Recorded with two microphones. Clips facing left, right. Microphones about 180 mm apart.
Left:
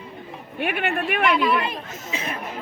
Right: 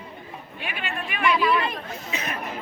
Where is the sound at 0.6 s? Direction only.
60° left (ahead or behind).